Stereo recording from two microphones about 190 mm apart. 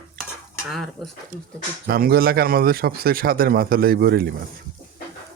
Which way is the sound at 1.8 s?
50° right (ahead or behind).